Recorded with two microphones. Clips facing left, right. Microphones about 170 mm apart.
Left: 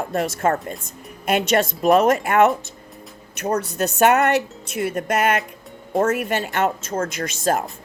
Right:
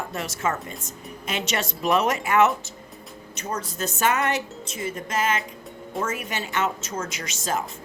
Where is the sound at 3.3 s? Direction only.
65° left (ahead or behind).